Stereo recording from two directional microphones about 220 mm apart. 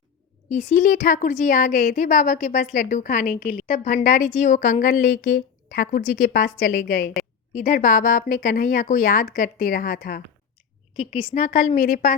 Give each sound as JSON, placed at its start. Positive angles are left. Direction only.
{"t": 0.5, "sound": "a woman's voice", "side_deg": 35}
{"t": 11.0, "sound": "a woman's voice", "side_deg": 25}